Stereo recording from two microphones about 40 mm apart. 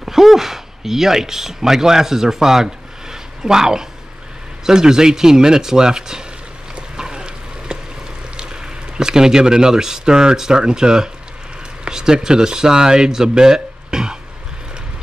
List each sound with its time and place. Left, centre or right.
0.0 s speech: centre
6.7 s a sound: centre
8.4 s speech: centre